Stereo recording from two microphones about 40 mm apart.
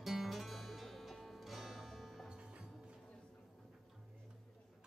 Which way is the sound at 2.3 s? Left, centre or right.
Right.